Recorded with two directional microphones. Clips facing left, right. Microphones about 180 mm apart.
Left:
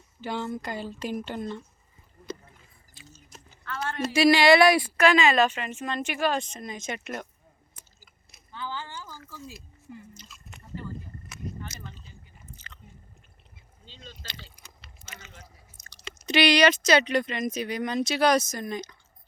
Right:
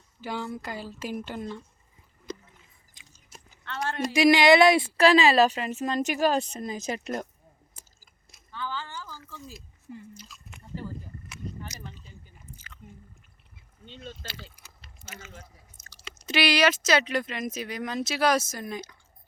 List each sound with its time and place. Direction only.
0.2 s speech: 5° right (ahead or behind)
2.9 s a sound: 15° right (ahead or behind)
4.0 s a woman's voice: 15° right (ahead or behind); by 7.3 s 35° right (ahead or behind)
8.5 s a sound: 15° left (ahead or behind)
10.2 s drip: 5° right (ahead or behind)
12.5 s biting: 10° right (ahead or behind)
13.8 s a sound: 60° right (ahead or behind)
14.3 s keys jangling: 5° right (ahead or behind)
15.0 s chewing: 5° right (ahead or behind)
16.2 s speech: 5° right (ahead or behind)